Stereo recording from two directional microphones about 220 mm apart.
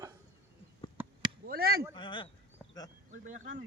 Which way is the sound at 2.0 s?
20° left (ahead or behind).